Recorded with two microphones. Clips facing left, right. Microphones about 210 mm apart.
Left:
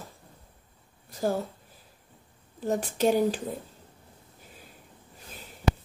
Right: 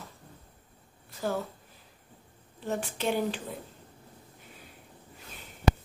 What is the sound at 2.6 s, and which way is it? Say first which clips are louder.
Speech: left 6 dB; 40° left (ahead or behind).